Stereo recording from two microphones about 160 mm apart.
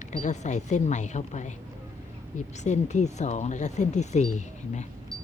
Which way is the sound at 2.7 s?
45° left (ahead or behind).